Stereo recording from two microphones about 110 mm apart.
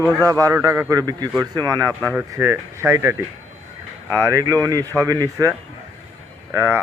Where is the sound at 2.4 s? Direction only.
20° right (ahead or behind).